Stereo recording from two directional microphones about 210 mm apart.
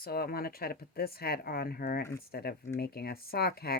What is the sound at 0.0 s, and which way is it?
Speech, 45° left (ahead or behind).